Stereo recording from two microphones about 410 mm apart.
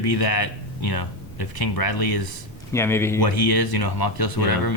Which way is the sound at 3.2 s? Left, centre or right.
Left.